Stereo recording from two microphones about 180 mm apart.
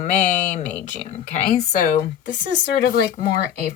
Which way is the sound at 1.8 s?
85° left.